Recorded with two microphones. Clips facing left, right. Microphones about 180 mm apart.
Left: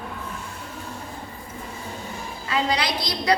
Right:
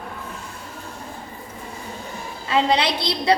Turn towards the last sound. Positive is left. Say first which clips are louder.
# right 3 dB
turn(degrees=-25)  # may be behind; listen again after turning